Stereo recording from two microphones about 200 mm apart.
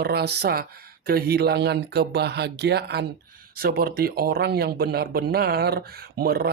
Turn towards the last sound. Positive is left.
turn(degrees=-50)  # may be behind; listen again after turning